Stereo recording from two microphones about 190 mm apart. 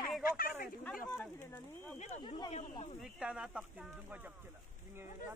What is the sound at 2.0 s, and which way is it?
Speech, 35° left (ahead or behind).